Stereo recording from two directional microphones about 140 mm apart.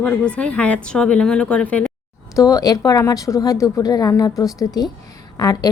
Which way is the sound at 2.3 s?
25° left (ahead or behind).